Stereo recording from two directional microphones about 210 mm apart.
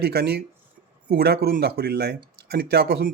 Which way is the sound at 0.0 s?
50° right (ahead or behind).